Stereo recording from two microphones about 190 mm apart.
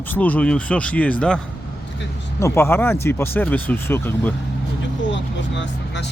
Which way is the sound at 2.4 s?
10° left (ahead or behind).